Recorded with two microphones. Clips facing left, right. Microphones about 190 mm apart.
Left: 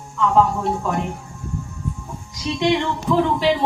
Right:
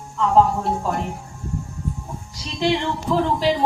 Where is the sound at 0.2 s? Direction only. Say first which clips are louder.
Even; 35° right (ahead or behind).